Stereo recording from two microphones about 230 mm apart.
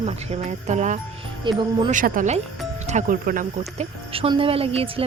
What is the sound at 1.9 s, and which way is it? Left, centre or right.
Speech, right.